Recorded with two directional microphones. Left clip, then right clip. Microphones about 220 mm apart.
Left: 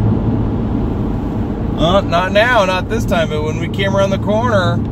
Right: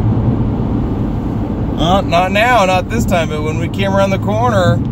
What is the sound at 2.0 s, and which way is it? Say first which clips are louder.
Speech: right 1 dB; 15° right (ahead or behind).